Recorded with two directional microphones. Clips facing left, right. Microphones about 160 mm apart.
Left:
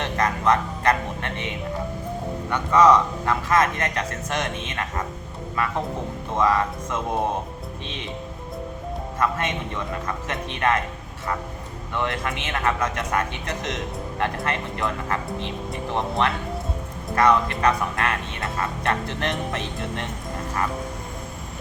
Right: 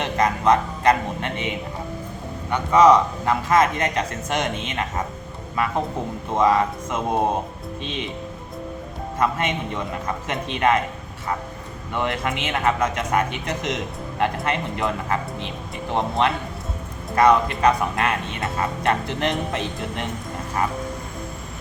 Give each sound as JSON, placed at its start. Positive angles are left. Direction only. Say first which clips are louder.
{"t": 0.0, "sound": "a man's voice", "louder": "right 3 dB", "side_deg": -15}
{"t": 9.1, "sound": "a man's voice", "louder": "right 3 dB", "side_deg": -15}
{"t": 11.9, "sound": "a man's voice", "louder": "right 2 dB", "side_deg": -15}